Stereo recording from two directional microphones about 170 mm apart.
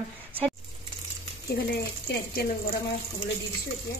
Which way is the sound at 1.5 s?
70° left (ahead or behind).